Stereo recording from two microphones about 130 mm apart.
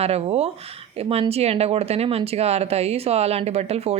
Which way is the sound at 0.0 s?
50° right (ahead or behind).